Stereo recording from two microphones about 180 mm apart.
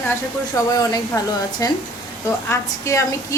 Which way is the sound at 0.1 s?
20° left (ahead or behind).